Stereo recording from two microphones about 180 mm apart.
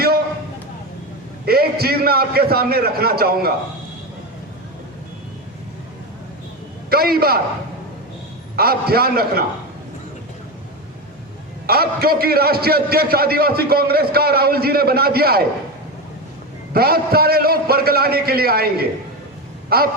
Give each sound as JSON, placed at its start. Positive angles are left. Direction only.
{"t": 1.5, "sound": "a man's voice", "side_deg": -60}
{"t": 6.9, "sound": "a man's voice", "side_deg": -60}
{"t": 8.5, "sound": "a man's voice", "side_deg": -60}
{"t": 11.6, "sound": "a man's voice", "side_deg": -60}
{"t": 16.7, "sound": "a man's voice", "side_deg": -60}